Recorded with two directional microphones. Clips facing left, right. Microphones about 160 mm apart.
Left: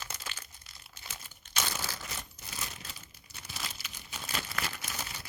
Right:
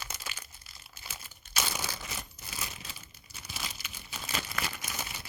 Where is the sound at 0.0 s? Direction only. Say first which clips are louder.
Right 1 dB; 10° right (ahead or behind).